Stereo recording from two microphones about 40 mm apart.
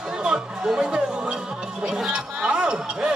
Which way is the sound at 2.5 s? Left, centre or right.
Right.